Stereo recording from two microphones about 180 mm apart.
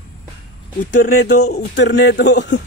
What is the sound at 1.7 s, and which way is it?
Speech, 70° left (ahead or behind).